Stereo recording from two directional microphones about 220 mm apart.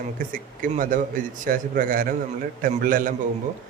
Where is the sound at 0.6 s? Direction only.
40° right (ahead or behind).